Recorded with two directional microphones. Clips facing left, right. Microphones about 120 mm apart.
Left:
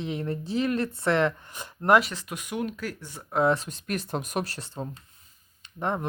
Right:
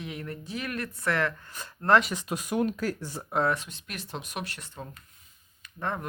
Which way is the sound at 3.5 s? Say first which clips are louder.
Left 6 dB; 40° left (ahead or behind).